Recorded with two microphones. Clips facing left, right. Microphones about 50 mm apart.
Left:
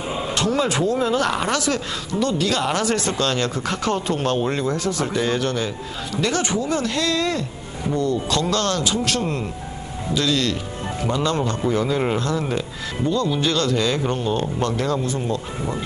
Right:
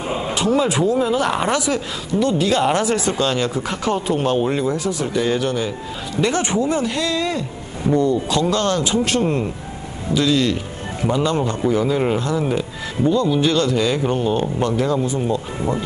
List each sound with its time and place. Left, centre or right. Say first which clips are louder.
0.1 s speech: right 3 dB; centre
6.2 s speech: right 3 dB; right
11.7 s speech: right 3 dB; centre
12.2 s speech: right 3 dB; centre